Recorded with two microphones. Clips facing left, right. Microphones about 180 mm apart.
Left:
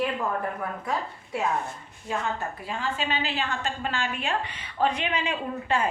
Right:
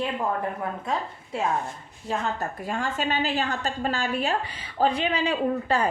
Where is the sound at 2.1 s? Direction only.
45° right (ahead or behind).